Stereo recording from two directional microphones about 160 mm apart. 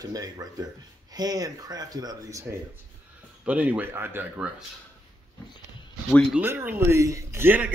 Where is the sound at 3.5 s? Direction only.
10° right (ahead or behind).